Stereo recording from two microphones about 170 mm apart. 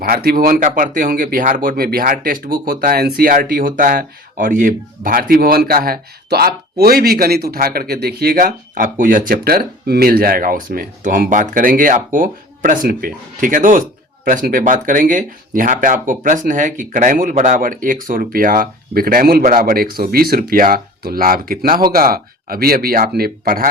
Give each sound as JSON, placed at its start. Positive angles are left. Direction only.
{"t": 0.0, "sound": "speech", "side_deg": -60}